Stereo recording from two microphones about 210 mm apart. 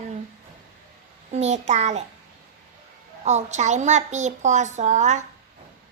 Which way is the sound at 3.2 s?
35° right (ahead or behind).